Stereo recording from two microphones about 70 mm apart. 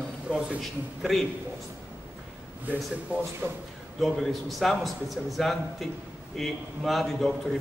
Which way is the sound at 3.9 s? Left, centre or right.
Centre.